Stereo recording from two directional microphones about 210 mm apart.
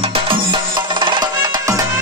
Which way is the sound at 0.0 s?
25° right (ahead or behind).